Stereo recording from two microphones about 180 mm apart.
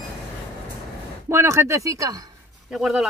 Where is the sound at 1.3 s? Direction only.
15° right (ahead or behind).